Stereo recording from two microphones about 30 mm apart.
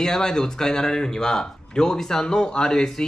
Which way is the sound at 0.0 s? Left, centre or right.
Centre.